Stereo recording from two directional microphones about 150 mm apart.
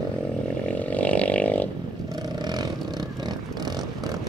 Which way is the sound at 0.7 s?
10° left (ahead or behind).